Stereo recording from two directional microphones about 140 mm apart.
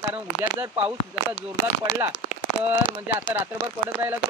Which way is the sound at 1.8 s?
25° right (ahead or behind).